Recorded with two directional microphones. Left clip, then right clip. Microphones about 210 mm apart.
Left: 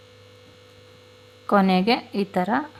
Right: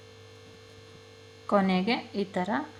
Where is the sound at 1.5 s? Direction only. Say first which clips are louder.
Left 7 dB; 45° left (ahead or behind).